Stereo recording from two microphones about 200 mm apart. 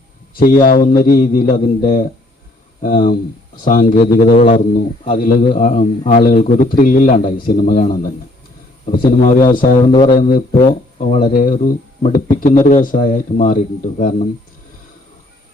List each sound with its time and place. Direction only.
0.3 s a man's voice: 45° left (ahead or behind)
9.9 s speech: 20° left (ahead or behind)
10.2 s a man's voice: 45° left (ahead or behind)